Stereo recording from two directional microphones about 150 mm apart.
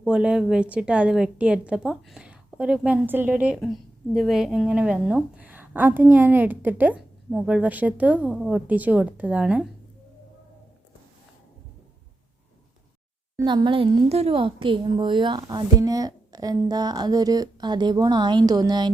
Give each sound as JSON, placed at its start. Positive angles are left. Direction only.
{"t": 0.0, "sound": "a woman's voice", "side_deg": -5}
{"t": 13.4, "sound": "a woman's voice", "side_deg": -30}